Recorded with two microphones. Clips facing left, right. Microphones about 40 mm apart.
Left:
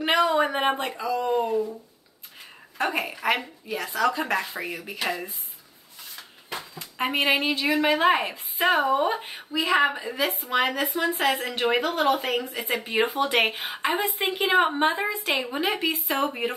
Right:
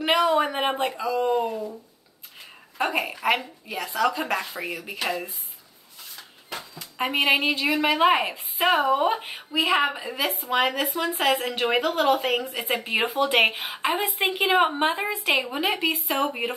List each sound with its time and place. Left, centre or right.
0.0 s a woman's voice: centre
2.8 s a woman's voice: centre
6.8 s a woman's voice: centre
8.8 s speech: centre
9.8 s a woman's voice: centre
15.4 s a woman's voice: centre